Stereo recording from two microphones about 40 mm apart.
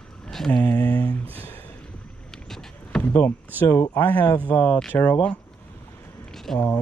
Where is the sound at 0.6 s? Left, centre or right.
Left.